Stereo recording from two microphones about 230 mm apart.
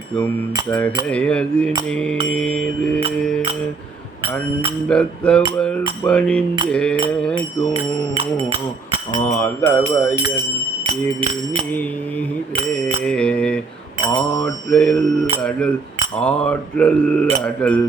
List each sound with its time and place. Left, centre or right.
1.1 s mantra: centre
4.9 s mantra: centre
8.1 s speech: right
9.2 s mantra: centre
13.1 s mantra: centre
16.2 s mantra: centre